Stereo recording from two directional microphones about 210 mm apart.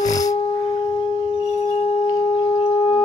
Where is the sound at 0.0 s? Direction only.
15° left (ahead or behind).